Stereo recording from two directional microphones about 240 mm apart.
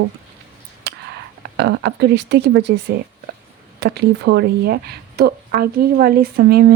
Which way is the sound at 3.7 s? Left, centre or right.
Right.